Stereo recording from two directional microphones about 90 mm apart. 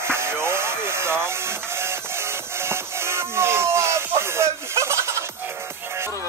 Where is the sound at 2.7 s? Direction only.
30° right (ahead or behind).